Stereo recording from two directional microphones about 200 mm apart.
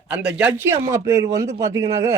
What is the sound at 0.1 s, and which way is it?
A man's voice, 5° right (ahead or behind).